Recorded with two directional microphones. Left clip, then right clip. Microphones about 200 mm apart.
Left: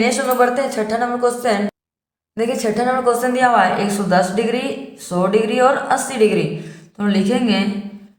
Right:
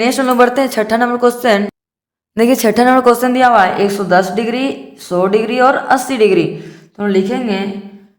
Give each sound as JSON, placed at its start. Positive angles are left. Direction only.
{"t": 0.0, "sound": "a woman's voice", "side_deg": -45}